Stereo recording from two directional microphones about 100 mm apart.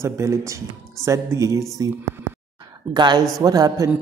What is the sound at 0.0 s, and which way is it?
A man's voice, 30° right (ahead or behind).